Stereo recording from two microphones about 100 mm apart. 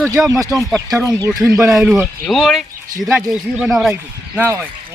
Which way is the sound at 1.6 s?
10° right (ahead or behind).